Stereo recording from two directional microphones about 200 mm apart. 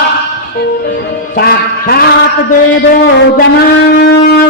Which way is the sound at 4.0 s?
55° left (ahead or behind).